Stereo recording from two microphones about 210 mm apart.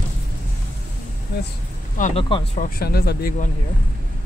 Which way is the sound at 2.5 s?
45° left (ahead or behind).